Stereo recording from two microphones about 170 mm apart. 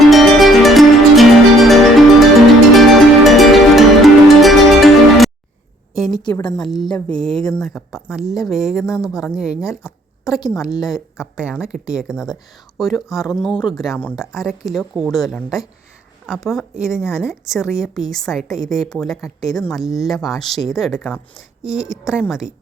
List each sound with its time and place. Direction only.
0.1 s music: centre (ahead or behind)
5.9 s a sound: centre (ahead or behind)
6.1 s a woman's voice: 25° left (ahead or behind)
6.6 s a woman's voice: centre (ahead or behind)
13.5 s a woman's voice: 25° left (ahead or behind)
13.7 s a woman's voice: centre (ahead or behind)
20.9 s speech: 15° left (ahead or behind)
21.6 s a woman's voice: 5° right (ahead or behind)